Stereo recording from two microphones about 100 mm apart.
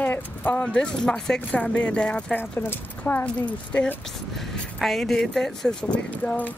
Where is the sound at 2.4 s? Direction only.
25° left (ahead or behind).